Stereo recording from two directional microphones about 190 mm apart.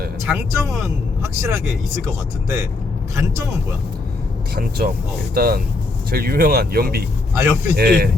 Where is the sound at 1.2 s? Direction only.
15° right (ahead or behind).